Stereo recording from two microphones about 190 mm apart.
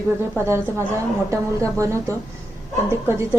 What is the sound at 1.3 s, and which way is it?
A woman's voice, 15° right (ahead or behind).